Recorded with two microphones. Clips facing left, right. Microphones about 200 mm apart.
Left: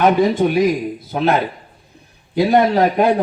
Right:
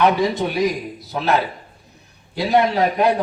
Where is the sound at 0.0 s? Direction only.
50° left (ahead or behind).